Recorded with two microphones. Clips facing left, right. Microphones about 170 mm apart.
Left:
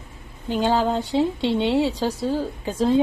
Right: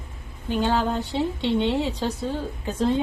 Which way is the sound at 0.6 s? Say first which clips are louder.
Left 3 dB; 10° left (ahead or behind).